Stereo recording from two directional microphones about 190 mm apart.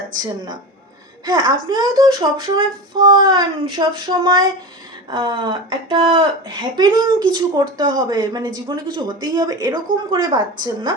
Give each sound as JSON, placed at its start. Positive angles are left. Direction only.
{"t": 1.2, "sound": "speech", "side_deg": -20}